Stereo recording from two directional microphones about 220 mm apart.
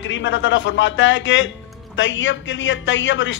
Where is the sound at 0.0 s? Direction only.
55° left (ahead or behind).